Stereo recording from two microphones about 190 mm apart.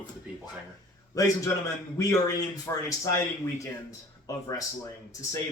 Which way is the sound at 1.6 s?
15° left (ahead or behind).